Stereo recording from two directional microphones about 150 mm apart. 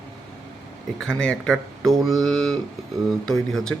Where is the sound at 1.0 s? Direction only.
5° left (ahead or behind).